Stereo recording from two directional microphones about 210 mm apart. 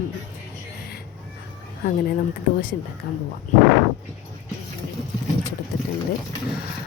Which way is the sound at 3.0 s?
45° left (ahead or behind).